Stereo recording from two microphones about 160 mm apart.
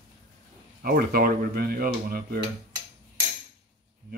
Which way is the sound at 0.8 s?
70° right (ahead or behind).